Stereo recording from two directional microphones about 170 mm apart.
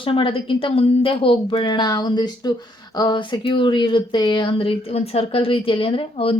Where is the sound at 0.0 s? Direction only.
30° left (ahead or behind).